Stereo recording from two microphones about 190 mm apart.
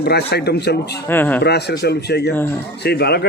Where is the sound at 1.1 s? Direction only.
10° left (ahead or behind).